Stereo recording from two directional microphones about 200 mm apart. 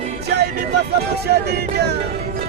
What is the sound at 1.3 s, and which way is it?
Speech, 55° right (ahead or behind).